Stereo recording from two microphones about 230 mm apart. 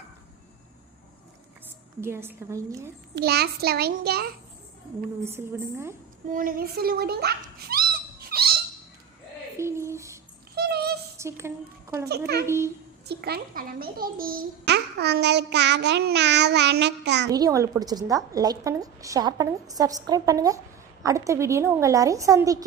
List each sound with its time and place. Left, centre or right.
2.0 s a woman's voice: centre
3.2 s child singing: right
5.2 s a woman's voice: centre
6.3 s a child's voice: right
8.3 s owl: right
9.6 s a sound: centre
10.5 s a sound: right
11.2 s a woman's voice: centre
12.0 s child singing: right
12.5 s a woman's voice: centre
13.1 s a child's voice: right
14.7 s child singing: right
17.3 s a woman's voice: centre